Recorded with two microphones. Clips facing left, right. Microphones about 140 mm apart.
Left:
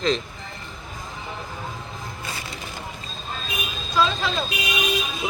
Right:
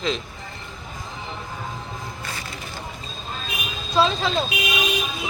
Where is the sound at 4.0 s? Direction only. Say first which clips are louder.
Right 2 dB; 25° right (ahead or behind).